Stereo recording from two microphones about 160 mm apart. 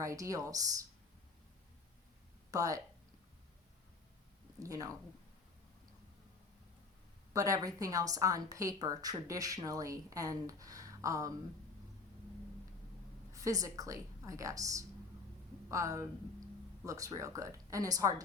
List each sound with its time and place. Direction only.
0.0 s a woman's voice: 20° right (ahead or behind)
2.5 s a woman's voice: 20° right (ahead or behind)
4.6 s a woman's voice: 20° right (ahead or behind)
7.3 s a woman's voice: 20° right (ahead or behind)
13.3 s a woman's voice: 20° right (ahead or behind)